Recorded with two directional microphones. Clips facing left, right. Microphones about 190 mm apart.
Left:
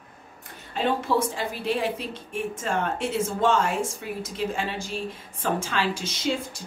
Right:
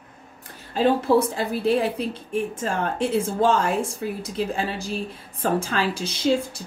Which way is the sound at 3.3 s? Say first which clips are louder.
Right 1 dB; 35° right (ahead or behind).